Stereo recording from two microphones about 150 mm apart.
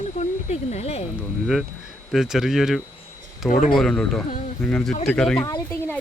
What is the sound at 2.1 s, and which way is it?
Speech, 5° right (ahead or behind).